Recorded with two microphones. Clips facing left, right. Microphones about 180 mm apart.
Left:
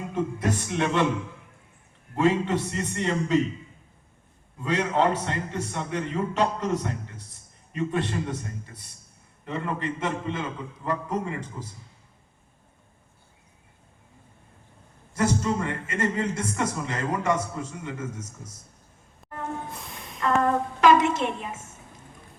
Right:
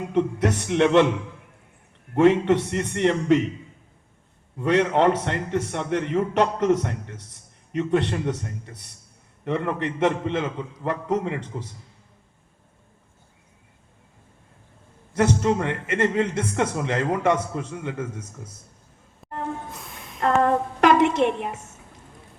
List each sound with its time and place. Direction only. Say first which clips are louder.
0.1 s a man's voice: right 5 dB; 70° right (ahead or behind)
2.1 s a man's voice: right 6 dB; 65° right (ahead or behind)
4.6 s a man's voice: right 5 dB; 65° right (ahead or behind)
15.1 s a man's voice: right 4 dB; 65° right (ahead or behind)
19.2 s music: right 5 dB; centre (ahead or behind)
19.8 s a sound: even; centre (ahead or behind)
20.8 s a sound: right 2 dB; 65° right (ahead or behind)